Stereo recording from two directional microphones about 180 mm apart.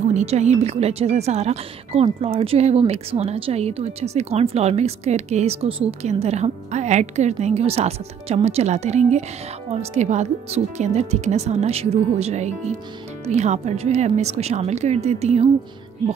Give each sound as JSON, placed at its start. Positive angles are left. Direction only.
{"t": 0.1, "sound": "speech", "side_deg": -40}